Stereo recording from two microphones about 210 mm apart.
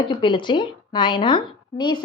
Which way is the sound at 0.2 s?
25° left (ahead or behind).